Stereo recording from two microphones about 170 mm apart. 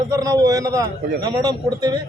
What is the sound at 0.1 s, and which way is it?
A man's voice, 20° right (ahead or behind).